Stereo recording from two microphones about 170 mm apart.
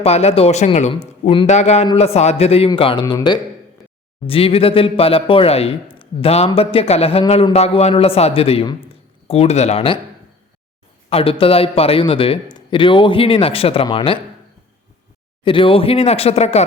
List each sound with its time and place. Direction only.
0.0 s a man's voice: 40° left (ahead or behind)
11.1 s a man's voice: 35° left (ahead or behind)
15.4 s a man's voice: 30° left (ahead or behind)